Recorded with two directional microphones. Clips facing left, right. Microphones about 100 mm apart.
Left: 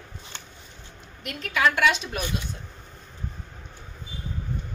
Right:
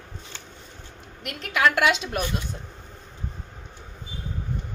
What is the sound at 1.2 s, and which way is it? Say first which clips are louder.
A woman's voice: right 1 dB; 65° right (ahead or behind).